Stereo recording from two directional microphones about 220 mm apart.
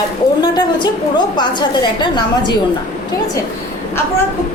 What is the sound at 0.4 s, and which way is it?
A woman's voice, 20° left (ahead or behind).